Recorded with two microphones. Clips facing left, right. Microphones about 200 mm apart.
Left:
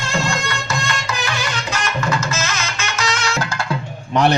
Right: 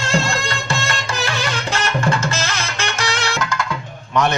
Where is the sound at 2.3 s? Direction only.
35° right (ahead or behind).